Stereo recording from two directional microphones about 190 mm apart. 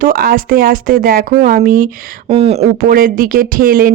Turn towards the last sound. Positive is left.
turn(degrees=-50)  # may be behind; listen again after turning